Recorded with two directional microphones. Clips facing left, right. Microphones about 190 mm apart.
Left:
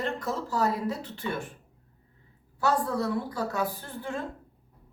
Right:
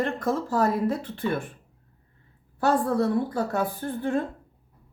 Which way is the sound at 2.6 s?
55° right (ahead or behind).